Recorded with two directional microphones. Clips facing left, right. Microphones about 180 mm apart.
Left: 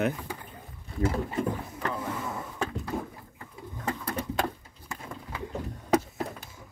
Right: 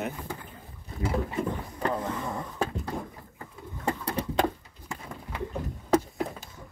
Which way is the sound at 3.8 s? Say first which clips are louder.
Right 2 dB; 30° right (ahead or behind).